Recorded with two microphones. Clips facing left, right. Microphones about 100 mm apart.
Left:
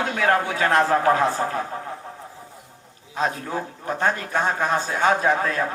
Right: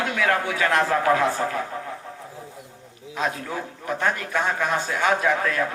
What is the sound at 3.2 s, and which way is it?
A man's voice, 35° left (ahead or behind).